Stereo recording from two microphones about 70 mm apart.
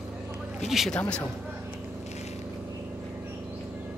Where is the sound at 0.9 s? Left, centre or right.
Centre.